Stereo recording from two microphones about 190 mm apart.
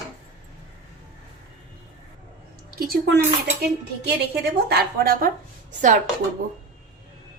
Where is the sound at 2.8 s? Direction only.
50° right (ahead or behind).